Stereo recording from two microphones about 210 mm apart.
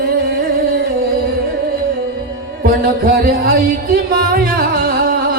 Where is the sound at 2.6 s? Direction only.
45° right (ahead or behind).